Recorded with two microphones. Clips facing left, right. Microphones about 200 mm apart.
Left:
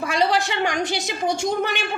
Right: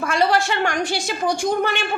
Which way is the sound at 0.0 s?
15° left (ahead or behind).